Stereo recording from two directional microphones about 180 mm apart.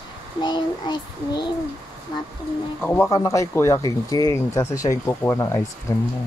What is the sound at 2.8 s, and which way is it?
Speech, 15° left (ahead or behind).